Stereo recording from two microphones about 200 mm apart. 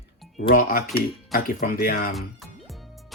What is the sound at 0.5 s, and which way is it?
Speech, 45° left (ahead or behind).